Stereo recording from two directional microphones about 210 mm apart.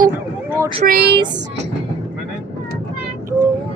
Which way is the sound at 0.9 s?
45° right (ahead or behind).